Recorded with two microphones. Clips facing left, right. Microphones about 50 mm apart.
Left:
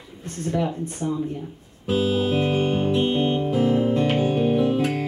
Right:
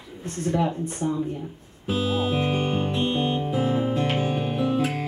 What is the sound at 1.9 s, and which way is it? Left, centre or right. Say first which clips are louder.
Music: left 3 dB; centre.